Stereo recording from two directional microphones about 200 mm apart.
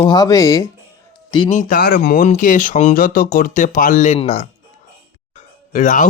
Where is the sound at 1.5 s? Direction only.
40° left (ahead or behind).